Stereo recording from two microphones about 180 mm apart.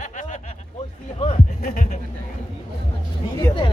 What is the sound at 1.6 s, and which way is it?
Speech, 45° left (ahead or behind).